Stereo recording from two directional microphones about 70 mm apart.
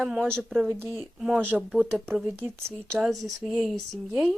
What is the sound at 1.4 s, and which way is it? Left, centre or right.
Speech, right.